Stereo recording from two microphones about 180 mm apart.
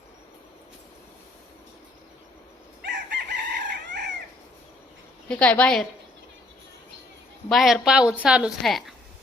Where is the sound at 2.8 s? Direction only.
75° right (ahead or behind).